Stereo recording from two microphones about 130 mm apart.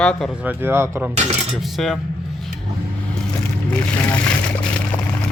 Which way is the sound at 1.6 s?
Centre (ahead or behind).